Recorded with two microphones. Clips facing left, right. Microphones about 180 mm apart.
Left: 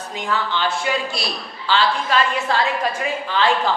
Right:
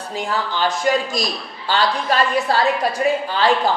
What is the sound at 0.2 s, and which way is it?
A man's voice, 40° right (ahead or behind).